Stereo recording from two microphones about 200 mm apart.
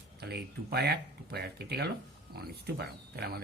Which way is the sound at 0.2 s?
50° right (ahead or behind).